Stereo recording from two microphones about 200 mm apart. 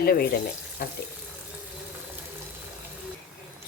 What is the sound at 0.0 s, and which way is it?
Speech, 50° left (ahead or behind).